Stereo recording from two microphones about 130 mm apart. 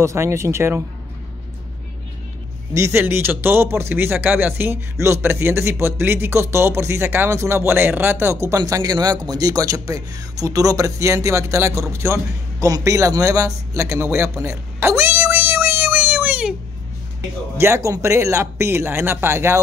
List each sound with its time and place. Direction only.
0.0 s speech: 20° right (ahead or behind)
2.7 s a man's voice: 20° right (ahead or behind)
17.6 s speech: 20° right (ahead or behind)